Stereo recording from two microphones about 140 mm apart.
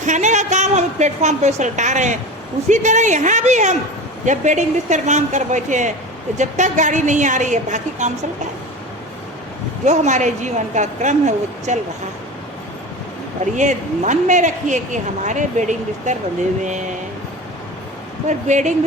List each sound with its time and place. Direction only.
0.0 s a woman's voice: 60° right (ahead or behind)
9.8 s a woman's voice: 55° right (ahead or behind)
13.4 s a woman's voice: 60° right (ahead or behind)
18.3 s a woman's voice: 60° right (ahead or behind)